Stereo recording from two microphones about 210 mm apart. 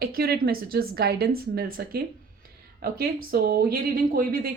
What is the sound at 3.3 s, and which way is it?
A woman's voice, 45° right (ahead or behind).